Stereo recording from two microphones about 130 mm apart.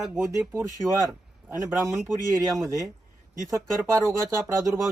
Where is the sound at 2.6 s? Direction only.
25° right (ahead or behind).